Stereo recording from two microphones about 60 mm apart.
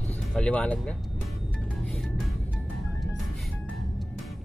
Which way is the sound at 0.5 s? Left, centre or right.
Centre.